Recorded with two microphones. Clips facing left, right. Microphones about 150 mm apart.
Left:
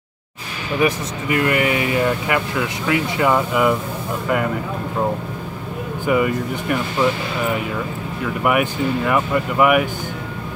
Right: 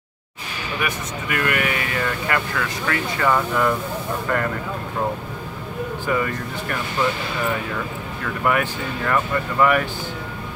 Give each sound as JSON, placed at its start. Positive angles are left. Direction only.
{"t": 0.7, "sound": "speech", "side_deg": 25}
{"t": 6.0, "sound": "speech", "side_deg": 10}
{"t": 8.2, "sound": "speech", "side_deg": 10}